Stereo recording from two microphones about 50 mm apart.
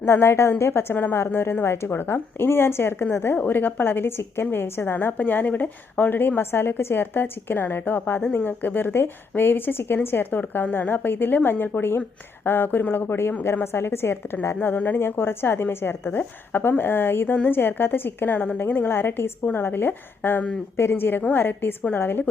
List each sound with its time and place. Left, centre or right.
0.0 s a woman's voice: left
20.7 s a woman's voice: left